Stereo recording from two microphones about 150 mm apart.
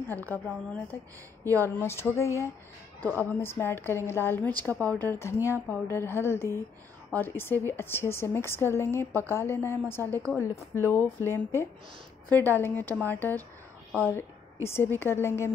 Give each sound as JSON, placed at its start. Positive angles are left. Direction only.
{"t": 0.1, "sound": "a woman's voice", "side_deg": 10}
{"t": 1.4, "sound": "a woman's voice", "side_deg": 15}